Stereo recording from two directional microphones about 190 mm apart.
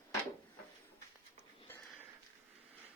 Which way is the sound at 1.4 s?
10° left (ahead or behind).